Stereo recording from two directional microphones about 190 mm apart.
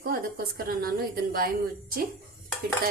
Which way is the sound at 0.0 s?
50° right (ahead or behind).